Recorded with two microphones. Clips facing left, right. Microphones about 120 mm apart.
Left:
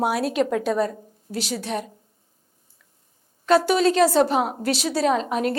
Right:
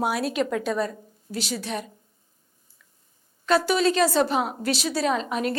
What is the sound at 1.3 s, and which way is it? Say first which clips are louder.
Speech: left 3 dB; 50° left (ahead or behind).